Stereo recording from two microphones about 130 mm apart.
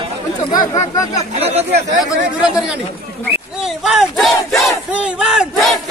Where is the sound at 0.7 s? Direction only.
25° left (ahead or behind).